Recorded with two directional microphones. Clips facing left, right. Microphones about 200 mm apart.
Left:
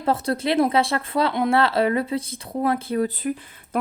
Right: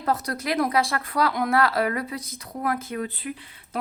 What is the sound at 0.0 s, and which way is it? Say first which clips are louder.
A woman's voice: left 4 dB; 30° left (ahead or behind).